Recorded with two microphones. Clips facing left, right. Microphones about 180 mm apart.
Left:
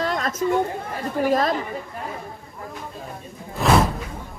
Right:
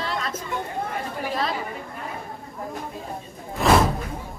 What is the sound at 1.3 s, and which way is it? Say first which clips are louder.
Speech: left 7 dB; 45° left (ahead or behind).